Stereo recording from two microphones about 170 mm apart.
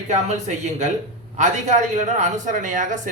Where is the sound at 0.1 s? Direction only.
45° right (ahead or behind).